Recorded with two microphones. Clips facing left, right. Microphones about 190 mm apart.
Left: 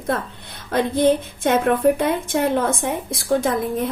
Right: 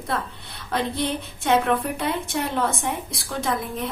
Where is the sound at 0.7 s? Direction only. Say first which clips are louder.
Left 8 dB; 50° left (ahead or behind).